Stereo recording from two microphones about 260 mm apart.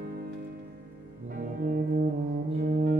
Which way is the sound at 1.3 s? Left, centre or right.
Right.